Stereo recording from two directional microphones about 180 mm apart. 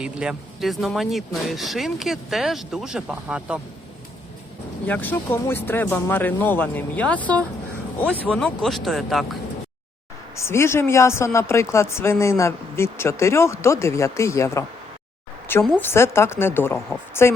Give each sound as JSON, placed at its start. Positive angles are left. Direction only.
{"t": 0.0, "sound": "speech", "side_deg": -5}
{"t": 4.9, "sound": "speech", "side_deg": 10}
{"t": 10.3, "sound": "speech", "side_deg": 15}
{"t": 15.8, "sound": "speech", "side_deg": 15}